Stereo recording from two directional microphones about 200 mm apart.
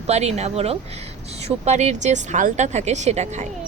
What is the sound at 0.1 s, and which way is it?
Speech, 35° right (ahead or behind).